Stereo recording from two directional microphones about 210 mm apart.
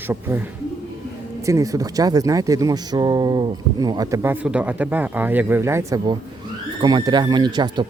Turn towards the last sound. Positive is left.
turn(degrees=-20)  # may be behind; listen again after turning